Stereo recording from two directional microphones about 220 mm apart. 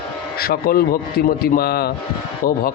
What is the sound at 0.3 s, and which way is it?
Speech, 45° left (ahead or behind).